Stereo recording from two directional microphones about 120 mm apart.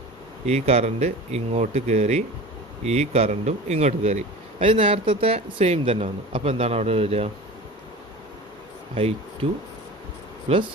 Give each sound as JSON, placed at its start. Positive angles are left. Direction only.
{"t": 0.4, "sound": "speech", "side_deg": -60}
{"t": 4.6, "sound": "speech", "side_deg": -50}
{"t": 9.0, "sound": "speech", "side_deg": -55}
{"t": 10.5, "sound": "speech", "side_deg": -50}